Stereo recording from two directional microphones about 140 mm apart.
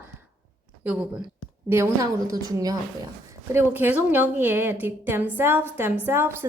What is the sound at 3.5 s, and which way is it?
A woman's voice, 15° right (ahead or behind).